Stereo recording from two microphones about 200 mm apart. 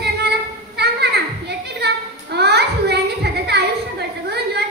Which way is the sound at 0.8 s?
55° right (ahead or behind).